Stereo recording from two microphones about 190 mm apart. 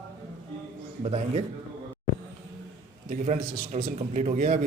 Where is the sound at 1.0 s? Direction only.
35° right (ahead or behind).